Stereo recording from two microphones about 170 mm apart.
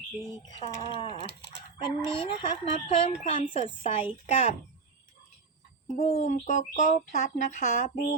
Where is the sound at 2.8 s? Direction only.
35° left (ahead or behind).